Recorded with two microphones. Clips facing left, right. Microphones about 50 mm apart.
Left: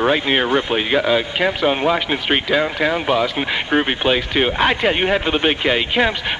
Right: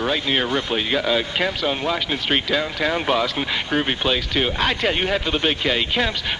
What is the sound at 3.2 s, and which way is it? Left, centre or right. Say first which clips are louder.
Speech: left 3 dB; centre.